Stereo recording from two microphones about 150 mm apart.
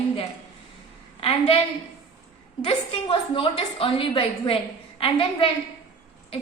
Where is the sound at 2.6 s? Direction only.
40° left (ahead or behind).